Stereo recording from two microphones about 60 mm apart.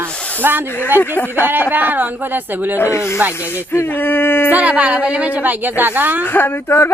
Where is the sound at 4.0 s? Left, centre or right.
Left.